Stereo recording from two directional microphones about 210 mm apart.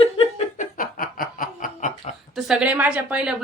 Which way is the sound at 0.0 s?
30° left (ahead or behind).